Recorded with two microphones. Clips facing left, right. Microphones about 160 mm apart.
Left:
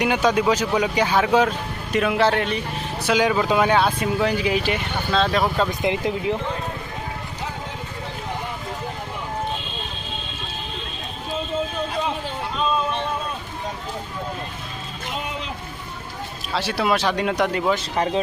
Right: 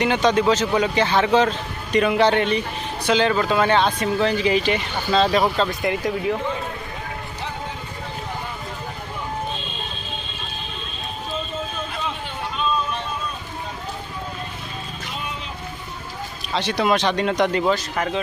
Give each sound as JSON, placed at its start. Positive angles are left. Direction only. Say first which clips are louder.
{"t": 0.0, "sound": "speech", "louder": "right 1 dB", "side_deg": 10}
{"t": 5.5, "sound": "speech", "louder": "even", "side_deg": 10}
{"t": 5.9, "sound": "speech", "louder": "even", "side_deg": 20}
{"t": 16.5, "sound": "speech", "louder": "right 1 dB", "side_deg": 5}
{"t": 17.9, "sound": "speech", "louder": "left 2 dB", "side_deg": 30}